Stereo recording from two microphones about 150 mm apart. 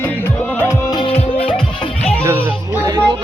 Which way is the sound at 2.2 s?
15° right (ahead or behind).